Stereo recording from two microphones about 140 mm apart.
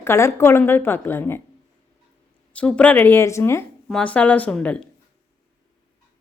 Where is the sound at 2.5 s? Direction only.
10° left (ahead or behind).